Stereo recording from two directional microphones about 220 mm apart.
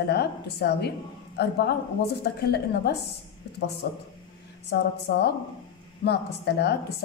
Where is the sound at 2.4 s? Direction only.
45° left (ahead or behind).